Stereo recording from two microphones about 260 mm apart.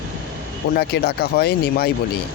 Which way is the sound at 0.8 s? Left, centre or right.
Left.